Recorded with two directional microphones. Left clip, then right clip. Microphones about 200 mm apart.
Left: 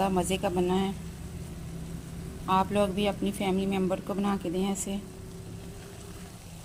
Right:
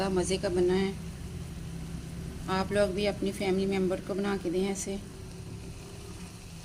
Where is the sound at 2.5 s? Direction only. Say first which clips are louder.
Left 2 dB; 40° left (ahead or behind).